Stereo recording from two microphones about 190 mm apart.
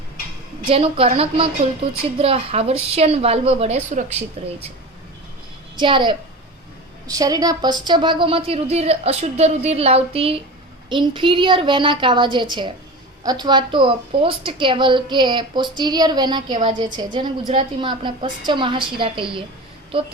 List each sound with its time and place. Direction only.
0.7 s a woman's voice: 30° right (ahead or behind)
5.8 s a woman's voice: 25° right (ahead or behind)